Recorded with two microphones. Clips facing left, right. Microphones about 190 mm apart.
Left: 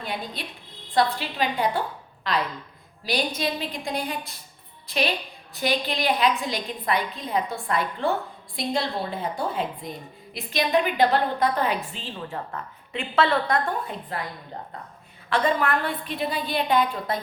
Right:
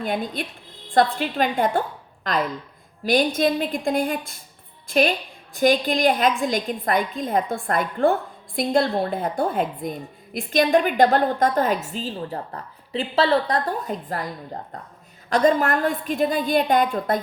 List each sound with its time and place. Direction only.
0.0 s a woman's voice: 50° right (ahead or behind)
15.3 s a woman's voice: 40° right (ahead or behind)